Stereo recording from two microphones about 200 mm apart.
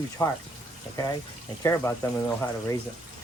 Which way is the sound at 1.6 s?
15° left (ahead or behind).